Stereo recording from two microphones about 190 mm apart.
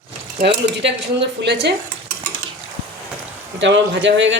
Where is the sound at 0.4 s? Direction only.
65° right (ahead or behind).